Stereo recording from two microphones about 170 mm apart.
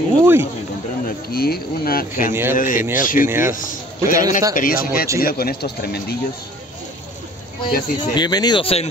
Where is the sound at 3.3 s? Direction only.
15° right (ahead or behind).